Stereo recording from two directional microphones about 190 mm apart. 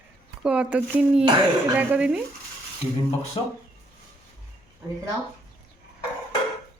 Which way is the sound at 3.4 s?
25° left (ahead or behind).